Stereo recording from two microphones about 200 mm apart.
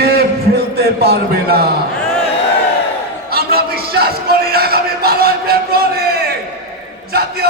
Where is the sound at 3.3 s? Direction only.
50° right (ahead or behind).